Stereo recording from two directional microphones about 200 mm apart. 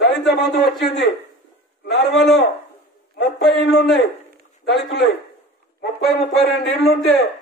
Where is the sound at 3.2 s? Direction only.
55° left (ahead or behind).